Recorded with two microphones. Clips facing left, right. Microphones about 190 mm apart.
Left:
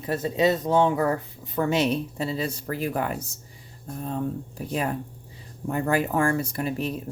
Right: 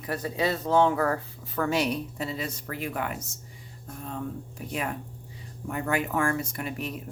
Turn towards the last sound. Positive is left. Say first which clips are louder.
# left 6 dB
turn(degrees=30)  # may be behind; listen again after turning